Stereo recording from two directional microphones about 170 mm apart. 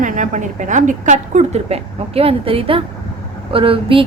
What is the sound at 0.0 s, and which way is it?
A woman's voice, 50° right (ahead or behind).